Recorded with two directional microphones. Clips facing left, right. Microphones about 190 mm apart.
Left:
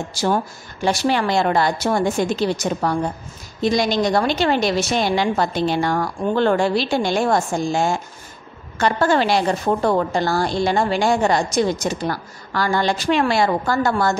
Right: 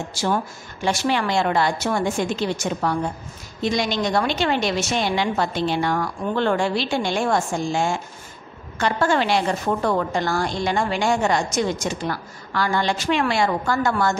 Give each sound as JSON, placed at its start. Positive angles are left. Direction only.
{"t": 0.1, "sound": "a woman's voice", "side_deg": 35}